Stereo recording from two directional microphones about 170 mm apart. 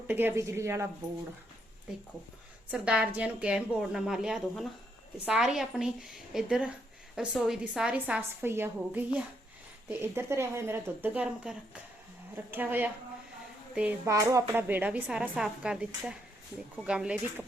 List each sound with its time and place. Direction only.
0.1 s speech: 10° right (ahead or behind)
2.6 s a woman's voice: 5° right (ahead or behind)